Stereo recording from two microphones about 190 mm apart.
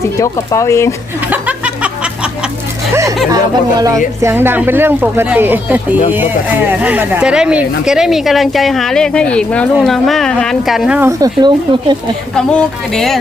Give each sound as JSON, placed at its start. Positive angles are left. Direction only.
{"t": 0.2, "sound": "speech", "side_deg": 15}
{"t": 1.3, "sound": "chuckle", "side_deg": -5}
{"t": 2.9, "sound": "speech", "side_deg": -15}
{"t": 12.4, "sound": "speech", "side_deg": 5}